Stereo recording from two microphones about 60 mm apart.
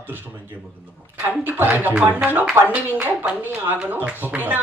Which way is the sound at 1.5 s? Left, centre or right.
Right.